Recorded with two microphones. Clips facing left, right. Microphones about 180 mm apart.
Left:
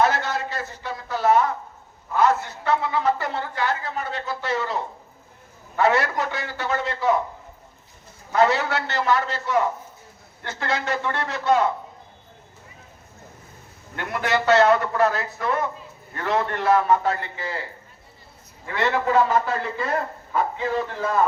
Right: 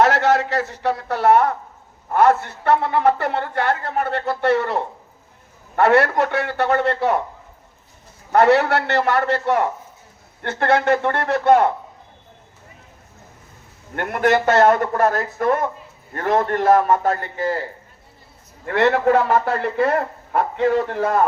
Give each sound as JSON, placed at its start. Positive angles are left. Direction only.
{"t": 0.0, "sound": "a man's voice", "side_deg": -80}
{"t": 8.3, "sound": "a man's voice", "side_deg": -65}
{"t": 13.9, "sound": "a man's voice", "side_deg": -50}
{"t": 18.6, "sound": "a man's voice", "side_deg": -60}